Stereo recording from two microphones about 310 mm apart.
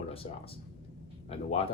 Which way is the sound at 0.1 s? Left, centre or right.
Centre.